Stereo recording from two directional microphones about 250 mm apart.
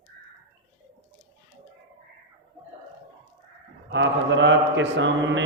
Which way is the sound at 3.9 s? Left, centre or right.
Right.